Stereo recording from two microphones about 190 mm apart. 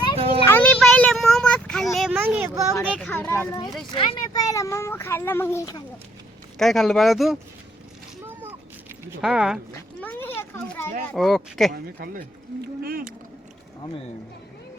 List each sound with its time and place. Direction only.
0.4 s a sound: 10° left (ahead or behind); by 2.6 s 10° right (ahead or behind)
2.9 s speech: 5° left (ahead or behind)
3.9 s speech: 25° left (ahead or behind)
6.6 s speech: centre (ahead or behind)
8.3 s vehicle: 10° right (ahead or behind)
9.2 s speech: 5° right (ahead or behind)
10.0 s a sound: 10° left (ahead or behind)
11.1 s speech: centre (ahead or behind)
11.7 s speech: 50° right (ahead or behind)